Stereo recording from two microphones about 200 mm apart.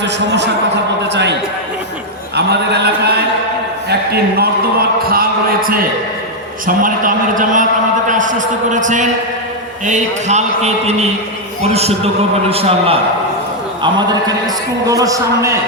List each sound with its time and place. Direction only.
1.0 s a man's voice: 60° right (ahead or behind)
2.3 s a man's voice: 55° right (ahead or behind); by 13.0 s 30° right (ahead or behind)
13.8 s a man's voice: 20° right (ahead or behind)